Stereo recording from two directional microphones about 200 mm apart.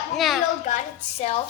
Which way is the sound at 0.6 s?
35° left (ahead or behind).